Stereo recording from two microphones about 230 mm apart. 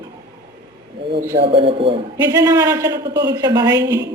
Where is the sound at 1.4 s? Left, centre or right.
Right.